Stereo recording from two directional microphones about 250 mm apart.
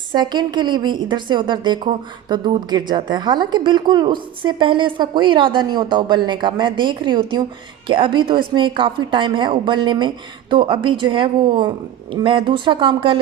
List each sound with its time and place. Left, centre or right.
0.1 s a woman's voice: centre